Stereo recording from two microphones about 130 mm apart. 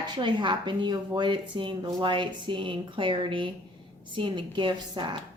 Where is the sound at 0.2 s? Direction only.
35° right (ahead or behind).